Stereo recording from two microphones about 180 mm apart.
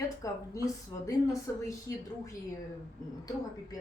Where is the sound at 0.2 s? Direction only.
20° left (ahead or behind).